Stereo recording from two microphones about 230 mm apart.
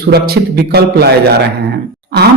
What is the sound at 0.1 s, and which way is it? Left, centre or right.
Speech, right.